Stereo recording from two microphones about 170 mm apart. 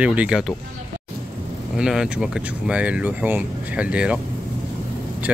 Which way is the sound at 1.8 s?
5° right (ahead or behind).